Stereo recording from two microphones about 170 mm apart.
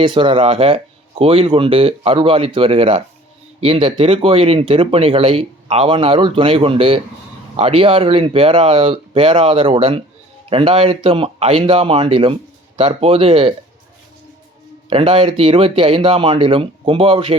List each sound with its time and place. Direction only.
0.0 s speech: 30° right (ahead or behind)
14.8 s speech: 30° right (ahead or behind)